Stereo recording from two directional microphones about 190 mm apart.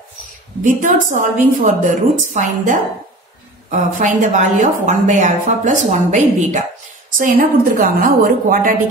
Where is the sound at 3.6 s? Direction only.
40° right (ahead or behind).